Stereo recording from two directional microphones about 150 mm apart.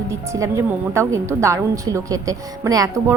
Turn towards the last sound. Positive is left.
turn(degrees=-20)  # may be behind; listen again after turning